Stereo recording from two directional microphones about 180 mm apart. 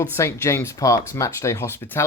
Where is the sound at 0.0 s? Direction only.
15° left (ahead or behind).